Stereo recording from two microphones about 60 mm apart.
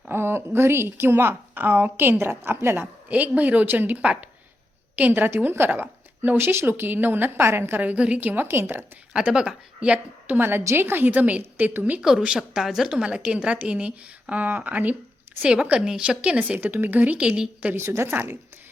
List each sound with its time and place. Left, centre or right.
0.1 s a woman's voice: right
3.1 s a woman's voice: right
7.8 s a woman's voice: right
9.1 s speech: centre
10.2 s a woman's voice: right
11.1 s a woman's voice: right
12.2 s a woman's voice: centre
16.6 s a woman's voice: right; by 17.5 s centre
17.7 s a woman's voice: right
18.1 s a woman's voice: right